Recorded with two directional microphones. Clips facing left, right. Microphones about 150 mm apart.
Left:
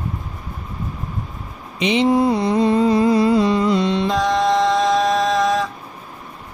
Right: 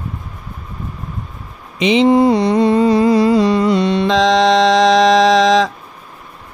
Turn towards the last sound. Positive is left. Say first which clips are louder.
# right 7 dB
turn(degrees=-90)